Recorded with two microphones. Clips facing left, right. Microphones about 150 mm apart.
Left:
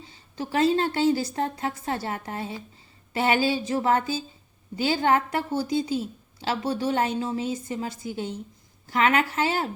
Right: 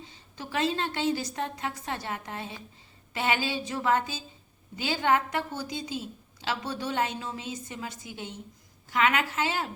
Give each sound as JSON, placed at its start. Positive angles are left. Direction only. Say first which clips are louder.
{"t": 0.3, "sound": "a woman's voice", "louder": "left 7 dB", "side_deg": 35}